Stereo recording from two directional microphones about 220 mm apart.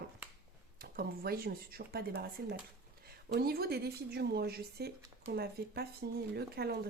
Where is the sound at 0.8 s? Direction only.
45° right (ahead or behind).